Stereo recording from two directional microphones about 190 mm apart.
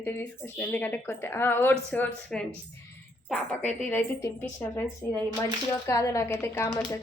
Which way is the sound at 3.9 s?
15° left (ahead or behind).